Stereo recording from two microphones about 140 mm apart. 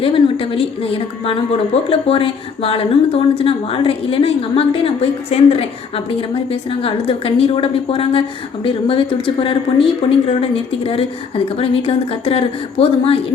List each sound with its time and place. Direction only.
0.0 s a woman's voice: 40° left (ahead or behind)